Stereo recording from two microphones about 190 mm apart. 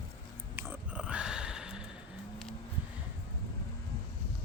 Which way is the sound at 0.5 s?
5° right (ahead or behind).